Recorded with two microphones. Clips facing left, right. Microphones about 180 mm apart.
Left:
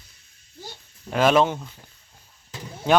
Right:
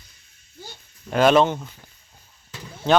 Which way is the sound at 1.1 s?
Centre (ahead or behind).